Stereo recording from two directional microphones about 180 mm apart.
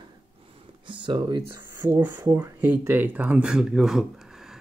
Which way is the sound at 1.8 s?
10° right (ahead or behind).